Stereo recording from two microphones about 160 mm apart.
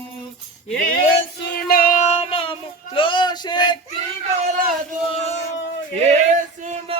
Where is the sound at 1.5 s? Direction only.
65° left (ahead or behind).